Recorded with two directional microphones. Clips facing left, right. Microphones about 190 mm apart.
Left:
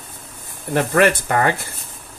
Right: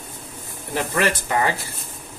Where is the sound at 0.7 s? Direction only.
55° left (ahead or behind).